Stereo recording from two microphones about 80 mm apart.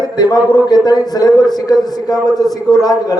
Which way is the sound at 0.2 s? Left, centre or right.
Left.